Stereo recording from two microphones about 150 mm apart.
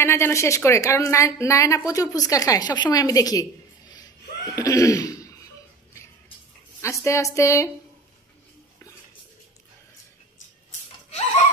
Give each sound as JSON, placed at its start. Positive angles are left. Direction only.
{"t": 0.0, "sound": "a woman's voice", "side_deg": 15}
{"t": 4.6, "sound": "laughter", "side_deg": 20}
{"t": 6.8, "sound": "a woman's voice", "side_deg": 20}